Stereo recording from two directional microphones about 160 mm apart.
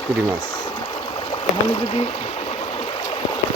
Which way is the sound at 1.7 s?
35° left (ahead or behind).